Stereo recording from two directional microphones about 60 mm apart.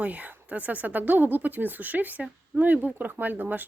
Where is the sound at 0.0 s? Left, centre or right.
Right.